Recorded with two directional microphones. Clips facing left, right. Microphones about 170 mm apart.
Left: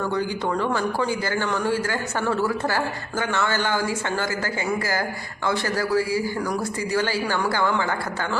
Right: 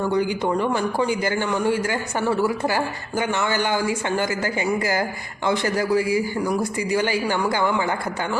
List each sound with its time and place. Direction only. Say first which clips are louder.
0.1 s a man's voice: right 3 dB; 15° right (ahead or behind)